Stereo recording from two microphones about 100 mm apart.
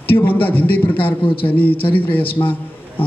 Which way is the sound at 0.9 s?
60° left (ahead or behind).